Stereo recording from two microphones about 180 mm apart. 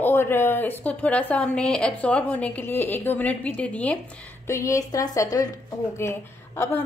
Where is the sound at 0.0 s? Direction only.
10° left (ahead or behind).